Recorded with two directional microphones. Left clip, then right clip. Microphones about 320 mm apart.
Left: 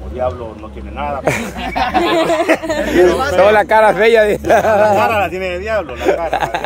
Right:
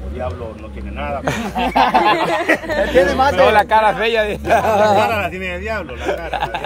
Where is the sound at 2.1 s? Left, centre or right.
Left.